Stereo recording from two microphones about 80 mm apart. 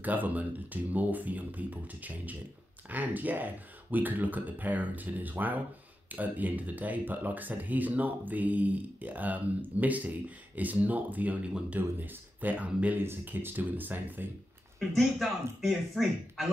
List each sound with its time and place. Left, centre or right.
0.0 s speech: right
14.8 s speech: centre